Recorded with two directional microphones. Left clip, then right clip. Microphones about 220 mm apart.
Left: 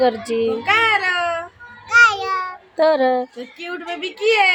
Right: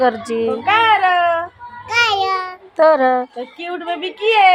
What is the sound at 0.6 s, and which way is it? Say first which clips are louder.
Cat: right 5 dB; 35° left (ahead or behind).